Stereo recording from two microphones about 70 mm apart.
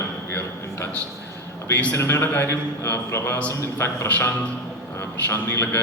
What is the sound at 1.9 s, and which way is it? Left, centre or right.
A man's voice, left.